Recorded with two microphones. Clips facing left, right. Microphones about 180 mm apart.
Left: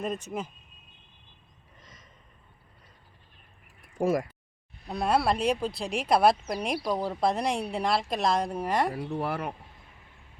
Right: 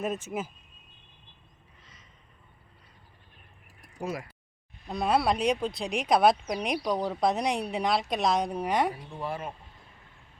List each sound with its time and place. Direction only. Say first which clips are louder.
0.0 s speech: right 1 dB; 5° right (ahead or behind)
3.9 s speech: left 9 dB; 50° left (ahead or behind)
4.9 s speech: even; centre (ahead or behind)
8.9 s speech: left 4 dB; 75° left (ahead or behind)